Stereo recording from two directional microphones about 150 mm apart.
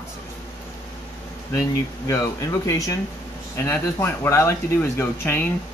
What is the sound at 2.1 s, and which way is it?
Speech, 20° left (ahead or behind).